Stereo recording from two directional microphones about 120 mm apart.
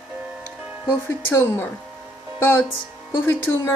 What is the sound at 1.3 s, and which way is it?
Speech, 20° left (ahead or behind).